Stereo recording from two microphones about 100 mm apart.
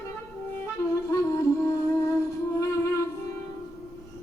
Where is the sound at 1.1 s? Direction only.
30° left (ahead or behind).